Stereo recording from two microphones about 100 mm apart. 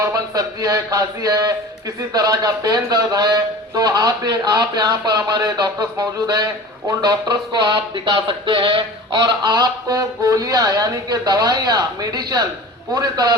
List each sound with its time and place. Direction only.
0.0 s speech: 35° right (ahead or behind)